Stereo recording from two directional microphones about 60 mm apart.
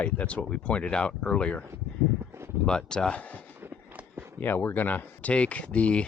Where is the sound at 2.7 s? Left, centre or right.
Centre.